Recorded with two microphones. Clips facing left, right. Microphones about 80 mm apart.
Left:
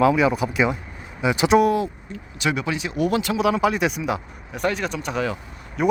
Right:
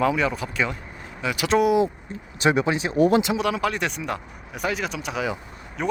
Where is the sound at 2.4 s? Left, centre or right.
Right.